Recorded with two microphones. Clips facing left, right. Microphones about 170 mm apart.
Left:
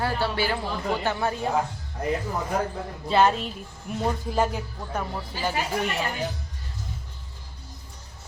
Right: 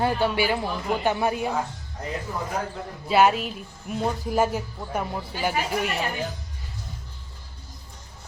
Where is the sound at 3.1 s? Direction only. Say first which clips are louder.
Right 1 dB; 10° right (ahead or behind).